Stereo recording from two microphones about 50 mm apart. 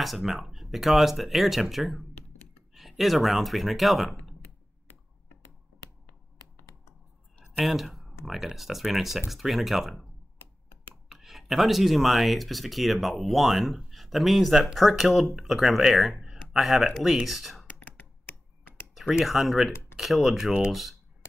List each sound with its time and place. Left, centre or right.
0.0 s speech: centre
7.6 s speech: centre
11.1 s speech: centre
17.6 s whispering: left
18.9 s speech: centre